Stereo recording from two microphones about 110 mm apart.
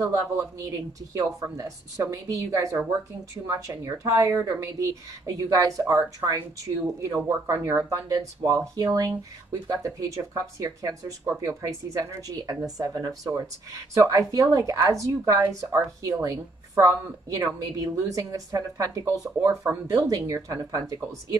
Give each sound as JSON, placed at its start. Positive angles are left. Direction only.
{"t": 0.0, "sound": "speech", "side_deg": -30}